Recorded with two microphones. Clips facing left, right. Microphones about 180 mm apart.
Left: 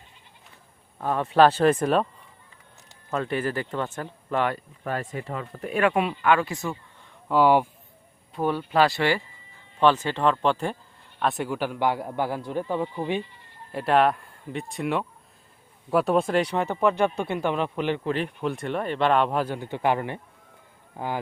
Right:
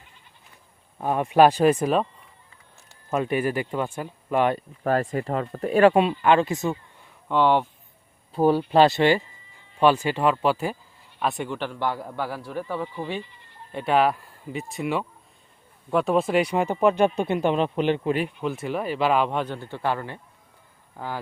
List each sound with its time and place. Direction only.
0.9 s speech: 15° right (ahead or behind)
3.1 s speech: 15° right (ahead or behind)
4.8 s speech: 45° right (ahead or behind); by 6.7 s 25° right (ahead or behind)
7.3 s a man's voice: 5° left (ahead or behind)
8.3 s a man's voice: 35° right (ahead or behind); by 13.2 s 20° left (ahead or behind)
13.7 s speech: centre (ahead or behind)
18.4 s speech: 5° right (ahead or behind)
19.5 s a man's voice: 15° left (ahead or behind)